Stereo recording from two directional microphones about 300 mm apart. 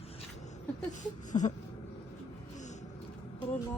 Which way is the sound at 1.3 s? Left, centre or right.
Left.